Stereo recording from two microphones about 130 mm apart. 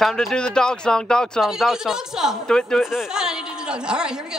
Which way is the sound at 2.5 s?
5° left (ahead or behind).